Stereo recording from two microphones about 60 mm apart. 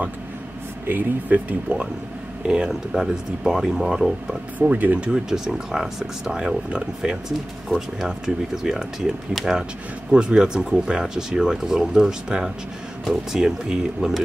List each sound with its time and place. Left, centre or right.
0.8 s speech: right
1.7 s speech: right; by 4.4 s centre
4.6 s speech: right
5.0 s speech: centre
8.6 s speech: centre